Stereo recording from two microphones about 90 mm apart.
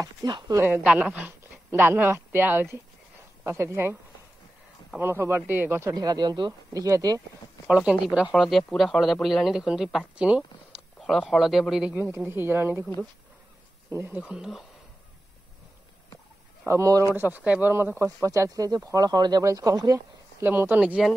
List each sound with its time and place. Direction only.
0.0 s speech: 45° right (ahead or behind)
0.8 s speech: 15° right (ahead or behind); by 3.9 s 30° right (ahead or behind)
4.9 s speech: 25° right (ahead or behind)
5.9 s speech: 50° right (ahead or behind)
6.7 s speech: 40° right (ahead or behind)
7.6 s a man's voice: 15° right (ahead or behind)
12.2 s speech: 25° right (ahead or behind)
13.8 s speech: 25° right (ahead or behind)
14.2 s speech: 10° right (ahead or behind)
16.6 s speech: 35° right (ahead or behind)
17.1 s speech: 20° right (ahead or behind); by 20.4 s 45° right (ahead or behind)
20.4 s speech: 25° right (ahead or behind)
20.8 s speech: 10° right (ahead or behind)